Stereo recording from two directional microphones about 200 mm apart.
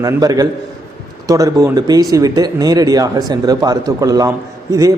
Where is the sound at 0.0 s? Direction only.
20° right (ahead or behind).